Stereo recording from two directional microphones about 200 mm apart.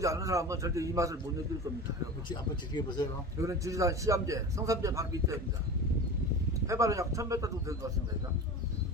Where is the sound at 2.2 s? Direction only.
20° left (ahead or behind).